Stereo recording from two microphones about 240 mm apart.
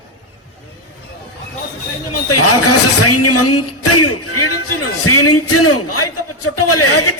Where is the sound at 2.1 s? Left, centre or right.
Left.